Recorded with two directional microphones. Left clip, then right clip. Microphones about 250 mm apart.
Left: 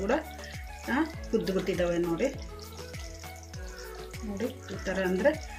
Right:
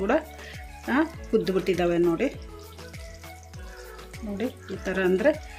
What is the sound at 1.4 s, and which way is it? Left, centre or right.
Speech, right.